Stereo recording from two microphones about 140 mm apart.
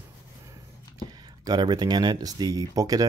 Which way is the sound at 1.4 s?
30° right (ahead or behind).